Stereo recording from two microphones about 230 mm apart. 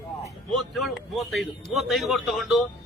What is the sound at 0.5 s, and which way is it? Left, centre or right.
A man's voice, centre.